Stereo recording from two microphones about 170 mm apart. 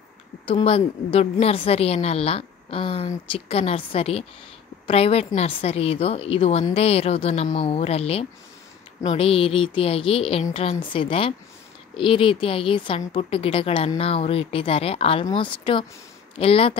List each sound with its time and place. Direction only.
0.5 s a woman's voice: 35° left (ahead or behind)